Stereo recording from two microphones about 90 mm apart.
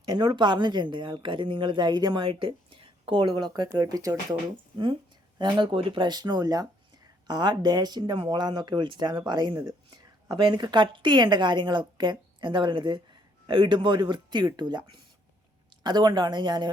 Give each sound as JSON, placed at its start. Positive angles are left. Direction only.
{"t": 0.0, "sound": "a woman's voice", "side_deg": -50}
{"t": 2.2, "sound": "speech", "side_deg": -70}
{"t": 5.4, "sound": "a woman's voice", "side_deg": -60}